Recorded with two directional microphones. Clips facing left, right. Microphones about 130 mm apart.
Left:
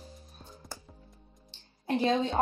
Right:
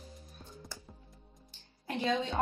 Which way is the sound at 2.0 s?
35° left (ahead or behind).